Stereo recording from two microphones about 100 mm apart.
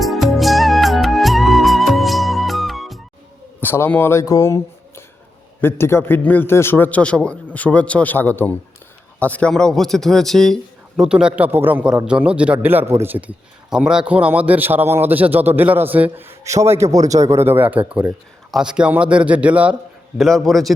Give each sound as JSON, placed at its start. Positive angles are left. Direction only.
{"t": 0.0, "sound": "music", "side_deg": 0}
{"t": 3.6, "sound": "a man's voice", "side_deg": 20}
{"t": 11.0, "sound": "a man's voice", "side_deg": -10}
{"t": 13.7, "sound": "a man's voice", "side_deg": -5}
{"t": 16.4, "sound": "a man's voice", "side_deg": -30}
{"t": 20.1, "sound": "speech", "side_deg": 0}